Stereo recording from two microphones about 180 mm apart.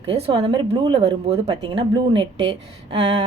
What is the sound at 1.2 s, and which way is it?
A woman's voice, 35° right (ahead or behind).